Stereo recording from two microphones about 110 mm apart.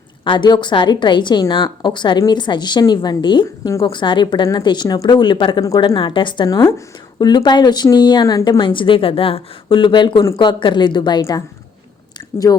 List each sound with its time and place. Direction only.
0.3 s a woman's voice: 45° left (ahead or behind)
6.6 s speech: 25° left (ahead or behind)
7.2 s a woman's voice: 40° left (ahead or behind)